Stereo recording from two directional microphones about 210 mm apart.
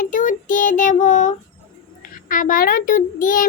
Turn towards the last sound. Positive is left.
turn(degrees=40)  # may be behind; listen again after turning